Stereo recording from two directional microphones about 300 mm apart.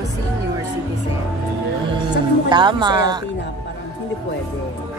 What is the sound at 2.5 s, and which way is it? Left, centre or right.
Speech, centre.